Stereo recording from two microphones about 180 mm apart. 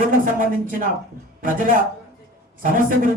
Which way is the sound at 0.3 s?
50° right (ahead or behind).